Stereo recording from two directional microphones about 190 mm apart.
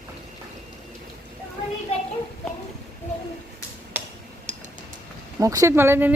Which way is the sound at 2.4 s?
5° left (ahead or behind).